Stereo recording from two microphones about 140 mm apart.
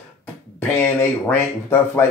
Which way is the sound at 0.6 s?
15° left (ahead or behind).